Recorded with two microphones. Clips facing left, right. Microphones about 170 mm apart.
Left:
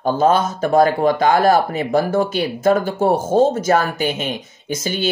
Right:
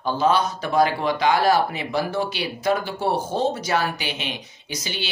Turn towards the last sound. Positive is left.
turn(degrees=50)  # may be behind; listen again after turning